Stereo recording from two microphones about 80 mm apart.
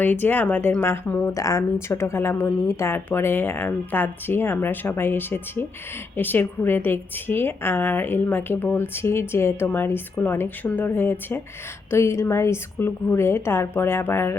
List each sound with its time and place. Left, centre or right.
0.0 s a woman's voice: left
1.3 s a woman's voice: left